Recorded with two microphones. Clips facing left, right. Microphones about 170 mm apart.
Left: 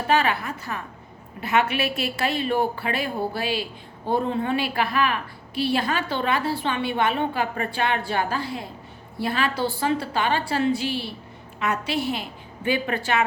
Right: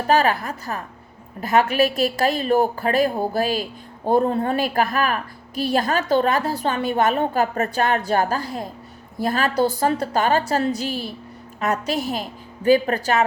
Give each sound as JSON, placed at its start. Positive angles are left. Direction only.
{"t": 0.1, "sound": "a woman's voice", "side_deg": -40}